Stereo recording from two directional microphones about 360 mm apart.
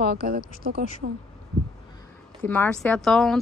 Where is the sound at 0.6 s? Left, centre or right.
Right.